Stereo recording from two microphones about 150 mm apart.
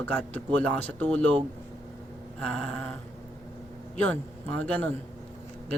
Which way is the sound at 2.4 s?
5° left (ahead or behind).